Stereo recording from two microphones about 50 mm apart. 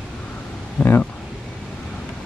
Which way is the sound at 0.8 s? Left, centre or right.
Left.